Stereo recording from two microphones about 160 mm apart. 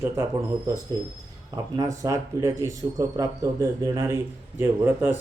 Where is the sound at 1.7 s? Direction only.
20° right (ahead or behind).